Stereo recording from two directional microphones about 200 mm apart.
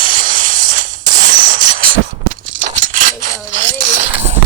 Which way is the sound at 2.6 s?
40° right (ahead or behind).